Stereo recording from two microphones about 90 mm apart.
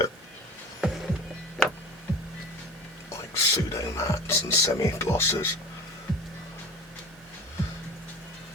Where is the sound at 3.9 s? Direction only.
35° left (ahead or behind).